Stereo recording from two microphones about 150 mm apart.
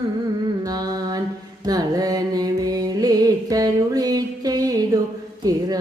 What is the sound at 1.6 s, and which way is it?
Music, 25° right (ahead or behind).